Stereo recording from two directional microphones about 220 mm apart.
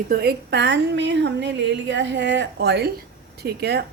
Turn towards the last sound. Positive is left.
turn(degrees=-45)  # may be behind; listen again after turning